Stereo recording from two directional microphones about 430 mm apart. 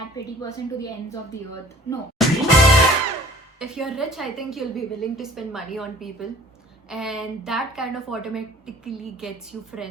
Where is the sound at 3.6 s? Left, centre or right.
Centre.